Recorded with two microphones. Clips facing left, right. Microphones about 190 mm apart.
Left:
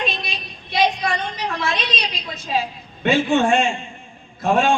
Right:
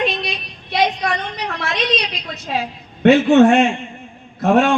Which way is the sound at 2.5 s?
65° right (ahead or behind).